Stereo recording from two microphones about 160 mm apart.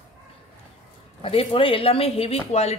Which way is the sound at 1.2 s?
35° left (ahead or behind).